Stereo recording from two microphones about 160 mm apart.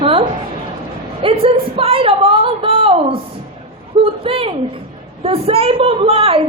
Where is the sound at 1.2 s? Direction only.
35° right (ahead or behind).